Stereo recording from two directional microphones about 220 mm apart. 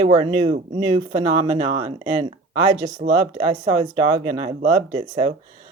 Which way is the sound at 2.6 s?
20° right (ahead or behind).